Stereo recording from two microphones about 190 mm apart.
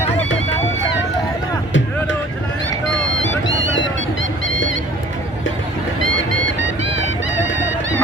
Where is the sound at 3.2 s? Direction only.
80° left.